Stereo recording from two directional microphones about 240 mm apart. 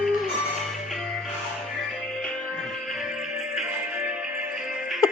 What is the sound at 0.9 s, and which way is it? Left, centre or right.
Music, centre.